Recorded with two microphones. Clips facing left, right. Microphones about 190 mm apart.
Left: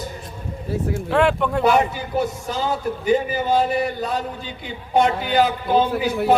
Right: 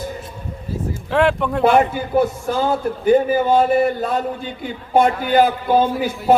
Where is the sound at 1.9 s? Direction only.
55° right (ahead or behind).